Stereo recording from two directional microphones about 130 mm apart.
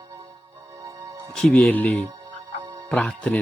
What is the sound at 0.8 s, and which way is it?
Music, 25° right (ahead or behind).